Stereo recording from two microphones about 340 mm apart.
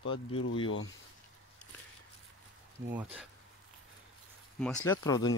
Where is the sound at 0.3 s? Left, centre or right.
Left.